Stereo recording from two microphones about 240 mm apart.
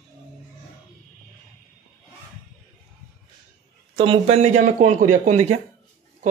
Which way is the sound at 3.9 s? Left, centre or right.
Right.